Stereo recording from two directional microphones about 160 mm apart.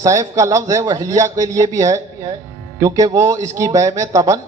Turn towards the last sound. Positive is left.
turn(degrees=-20)  # may be behind; listen again after turning